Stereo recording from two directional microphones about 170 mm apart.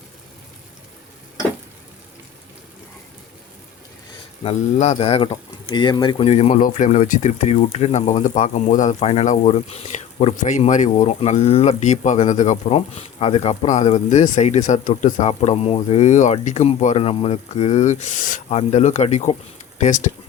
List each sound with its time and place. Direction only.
4.4 s speech: 35° left (ahead or behind)